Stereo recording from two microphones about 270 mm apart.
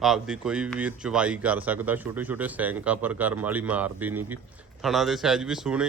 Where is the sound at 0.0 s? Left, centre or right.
Centre.